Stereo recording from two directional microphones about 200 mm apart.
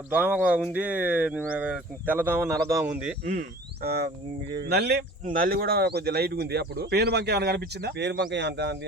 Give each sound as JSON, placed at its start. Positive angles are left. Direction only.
{"t": 0.1, "sound": "speech", "side_deg": -5}
{"t": 3.8, "sound": "speech", "side_deg": -55}